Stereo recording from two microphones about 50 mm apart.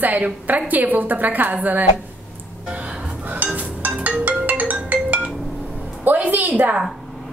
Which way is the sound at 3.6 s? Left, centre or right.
Right.